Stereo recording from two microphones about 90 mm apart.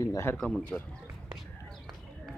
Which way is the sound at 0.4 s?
10° left (ahead or behind).